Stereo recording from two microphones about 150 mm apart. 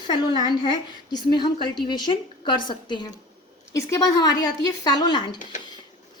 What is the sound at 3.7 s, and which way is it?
A woman's voice, 20° left (ahead or behind).